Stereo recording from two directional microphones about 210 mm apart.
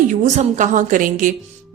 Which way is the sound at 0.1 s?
35° right (ahead or behind).